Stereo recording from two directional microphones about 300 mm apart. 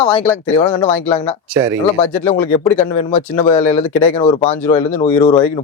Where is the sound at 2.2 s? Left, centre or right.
Centre.